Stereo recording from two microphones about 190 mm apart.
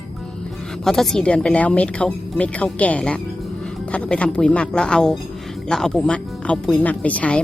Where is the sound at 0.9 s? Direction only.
Centre (ahead or behind).